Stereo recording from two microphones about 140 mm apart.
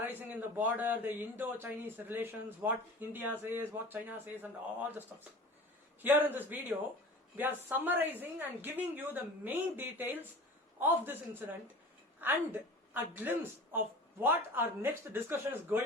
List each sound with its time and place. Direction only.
0.0 s a woman's voice: 15° right (ahead or behind)